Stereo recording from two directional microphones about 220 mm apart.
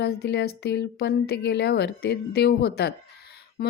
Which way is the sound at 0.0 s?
50° left (ahead or behind).